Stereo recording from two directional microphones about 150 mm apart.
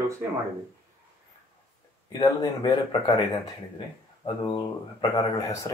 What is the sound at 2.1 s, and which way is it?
Speech, 25° left (ahead or behind).